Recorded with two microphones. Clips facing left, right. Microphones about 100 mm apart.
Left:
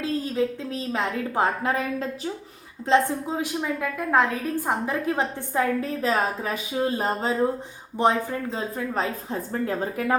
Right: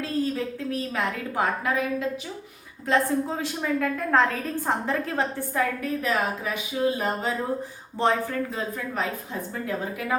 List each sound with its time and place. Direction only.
0.0 s a woman's voice: 20° left (ahead or behind)
2.8 s a woman's voice: 20° left (ahead or behind)
7.9 s speech: 15° left (ahead or behind)
8.4 s a woman's voice: 30° left (ahead or behind)
9.5 s a woman's voice: 40° left (ahead or behind)